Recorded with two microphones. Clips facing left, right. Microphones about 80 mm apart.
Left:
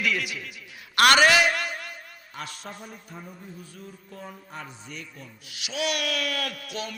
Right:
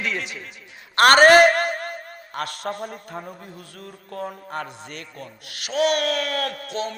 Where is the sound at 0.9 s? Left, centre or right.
Right.